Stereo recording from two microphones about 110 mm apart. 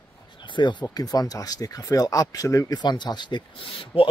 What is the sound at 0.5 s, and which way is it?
Speech, 45° left (ahead or behind).